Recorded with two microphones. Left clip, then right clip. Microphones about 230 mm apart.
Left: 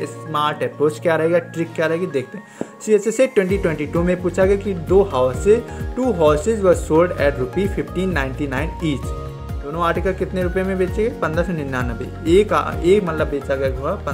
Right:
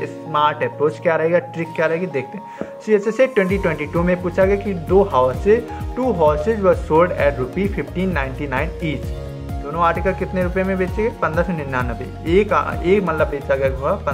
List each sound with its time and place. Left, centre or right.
0.0 s speech: left